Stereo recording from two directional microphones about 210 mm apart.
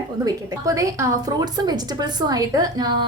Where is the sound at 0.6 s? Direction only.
15° right (ahead or behind).